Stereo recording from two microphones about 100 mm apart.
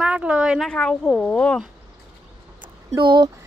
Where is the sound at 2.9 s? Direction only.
50° right (ahead or behind).